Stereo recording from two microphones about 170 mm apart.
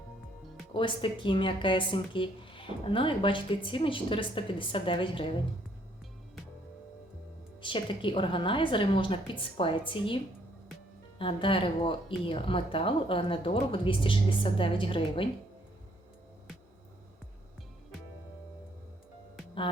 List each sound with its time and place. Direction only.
0.7 s speech: 30° left (ahead or behind)
7.6 s speech: 30° left (ahead or behind)
11.2 s speech: 30° left (ahead or behind)